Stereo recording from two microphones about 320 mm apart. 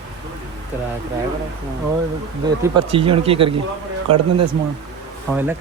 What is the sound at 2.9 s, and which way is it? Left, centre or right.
Speech, centre.